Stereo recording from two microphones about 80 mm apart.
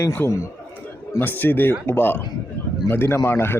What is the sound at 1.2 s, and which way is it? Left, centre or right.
Speech, left.